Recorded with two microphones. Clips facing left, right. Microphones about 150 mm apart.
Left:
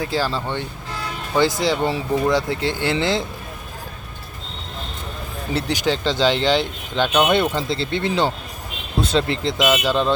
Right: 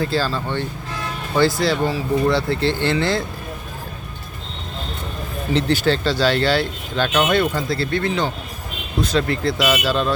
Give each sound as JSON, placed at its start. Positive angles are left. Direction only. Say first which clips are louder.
{"t": 0.0, "sound": "speech", "louder": "right 1 dB", "side_deg": 15}
{"t": 5.5, "sound": "speech", "louder": "right 3 dB", "side_deg": 15}